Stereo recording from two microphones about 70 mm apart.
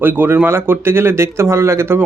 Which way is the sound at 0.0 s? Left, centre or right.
Right.